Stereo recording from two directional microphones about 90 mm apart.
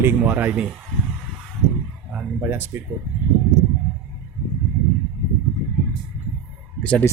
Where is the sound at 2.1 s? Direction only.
20° right (ahead or behind).